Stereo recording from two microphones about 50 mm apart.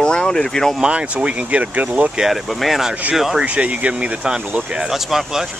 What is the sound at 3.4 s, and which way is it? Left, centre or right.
Speech, right.